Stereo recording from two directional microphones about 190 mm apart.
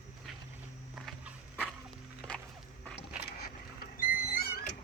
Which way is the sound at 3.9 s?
50° left (ahead or behind).